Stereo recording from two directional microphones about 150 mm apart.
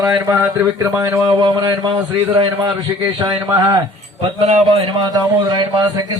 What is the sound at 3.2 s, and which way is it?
Speech, 25° right (ahead or behind).